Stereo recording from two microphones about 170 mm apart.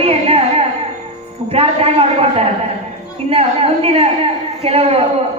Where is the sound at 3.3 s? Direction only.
35° right (ahead or behind).